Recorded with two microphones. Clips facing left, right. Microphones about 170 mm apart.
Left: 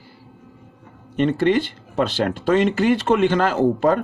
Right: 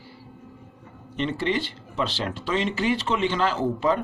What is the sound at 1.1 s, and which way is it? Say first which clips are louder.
Speech: left 8 dB; 50° left (ahead or behind).